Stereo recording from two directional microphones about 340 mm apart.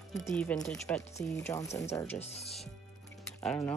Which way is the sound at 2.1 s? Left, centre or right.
Centre.